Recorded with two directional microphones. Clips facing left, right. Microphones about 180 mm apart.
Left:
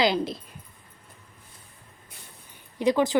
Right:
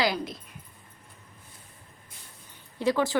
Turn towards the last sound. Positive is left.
turn(degrees=20)  # may be behind; listen again after turning